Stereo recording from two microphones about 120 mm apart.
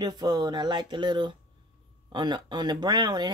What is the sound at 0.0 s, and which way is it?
Speech, 35° right (ahead or behind).